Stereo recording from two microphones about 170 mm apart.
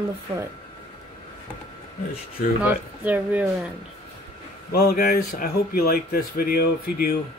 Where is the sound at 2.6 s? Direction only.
10° right (ahead or behind).